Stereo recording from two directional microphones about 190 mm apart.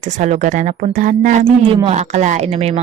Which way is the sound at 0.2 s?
40° right (ahead or behind).